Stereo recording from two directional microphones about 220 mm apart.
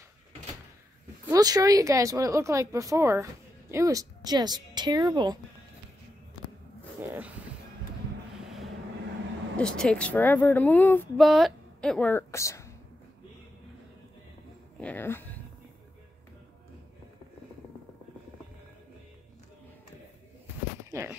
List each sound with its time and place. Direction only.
1.3 s speech: 15° right (ahead or behind)
7.1 s a sound: 5° right (ahead or behind)
8.4 s vehicle: centre (ahead or behind)
9.6 s speech: 5° left (ahead or behind)
14.8 s speech: 10° left (ahead or behind)
20.9 s speech: 10° right (ahead or behind)